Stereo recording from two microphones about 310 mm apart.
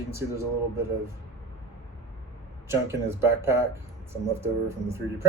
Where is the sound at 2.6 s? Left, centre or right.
Centre.